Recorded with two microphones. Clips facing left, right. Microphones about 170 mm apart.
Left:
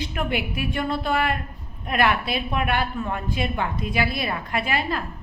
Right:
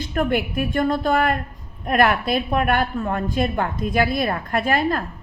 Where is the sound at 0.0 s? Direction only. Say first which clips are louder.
Right 5 dB; 45° right (ahead or behind).